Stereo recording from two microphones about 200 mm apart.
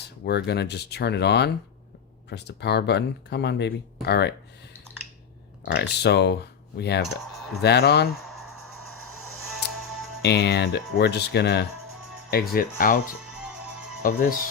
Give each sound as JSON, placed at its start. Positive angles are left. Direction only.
{"t": 0.3, "sound": "speech", "side_deg": 55}
{"t": 5.7, "sound": "speech", "side_deg": 55}
{"t": 9.6, "sound": "music", "side_deg": 55}
{"t": 10.2, "sound": "speech", "side_deg": 55}
{"t": 14.0, "sound": "speech", "side_deg": 45}